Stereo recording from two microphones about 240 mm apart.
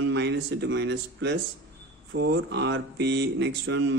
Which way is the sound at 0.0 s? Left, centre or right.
Right.